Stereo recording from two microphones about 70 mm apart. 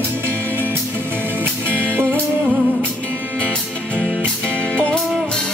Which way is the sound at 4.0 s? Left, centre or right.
Centre.